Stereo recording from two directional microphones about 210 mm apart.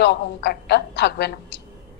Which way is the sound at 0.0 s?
50° left (ahead or behind).